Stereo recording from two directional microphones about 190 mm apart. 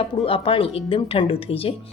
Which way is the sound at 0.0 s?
30° left (ahead or behind).